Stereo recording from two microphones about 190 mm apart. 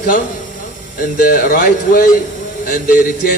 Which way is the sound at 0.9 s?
45° left (ahead or behind).